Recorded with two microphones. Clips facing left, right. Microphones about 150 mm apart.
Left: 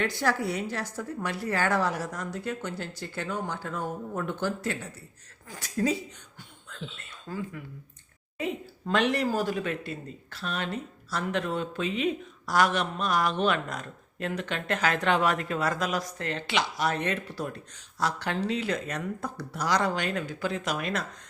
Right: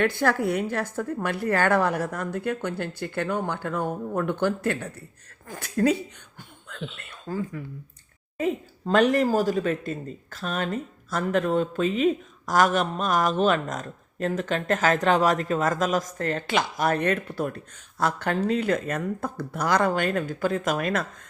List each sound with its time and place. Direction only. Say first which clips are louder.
0.0 s a woman's voice: right 5 dB; 55° right (ahead or behind)
6.7 s a sound: right 5 dB; 65° right (ahead or behind)
7.3 s speech: right 5 dB; 40° right (ahead or behind)